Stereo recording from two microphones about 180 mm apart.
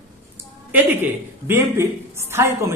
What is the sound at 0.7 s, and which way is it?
A woman's voice, 10° right (ahead or behind).